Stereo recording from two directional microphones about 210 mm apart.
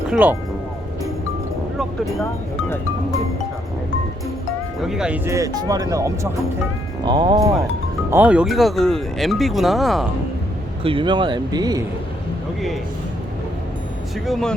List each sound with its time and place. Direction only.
0.1 s speech: 5° right (ahead or behind)
1.8 s vehicle: centre (ahead or behind)
4.8 s speech: centre (ahead or behind)
8.1 s speech: 5° right (ahead or behind)
10.8 s speech: 25° right (ahead or behind)
14.3 s speech: centre (ahead or behind)